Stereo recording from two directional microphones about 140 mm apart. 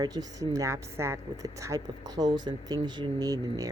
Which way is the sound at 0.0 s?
25° right (ahead or behind).